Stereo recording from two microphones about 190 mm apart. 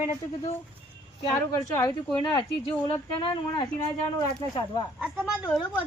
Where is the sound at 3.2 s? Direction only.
25° left (ahead or behind).